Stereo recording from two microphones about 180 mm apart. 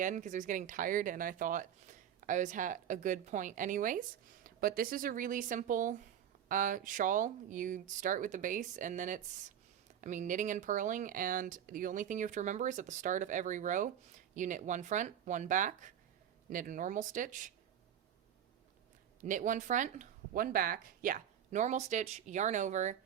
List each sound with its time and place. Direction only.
0.0 s speech: 45° right (ahead or behind)
19.2 s speech: 45° right (ahead or behind)